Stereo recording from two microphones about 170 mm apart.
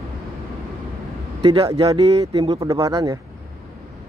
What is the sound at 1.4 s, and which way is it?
Speech, 35° right (ahead or behind).